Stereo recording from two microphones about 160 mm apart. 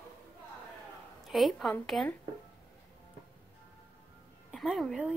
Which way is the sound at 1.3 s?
Centre (ahead or behind).